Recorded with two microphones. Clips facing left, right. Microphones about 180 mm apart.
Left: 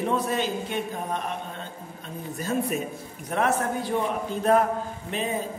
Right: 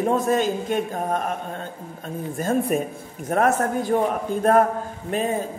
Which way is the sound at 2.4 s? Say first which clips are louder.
Right 5 dB; 50° right (ahead or behind).